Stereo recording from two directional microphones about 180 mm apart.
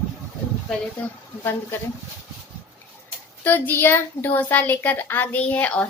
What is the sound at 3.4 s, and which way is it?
A child's voice, 10° left (ahead or behind).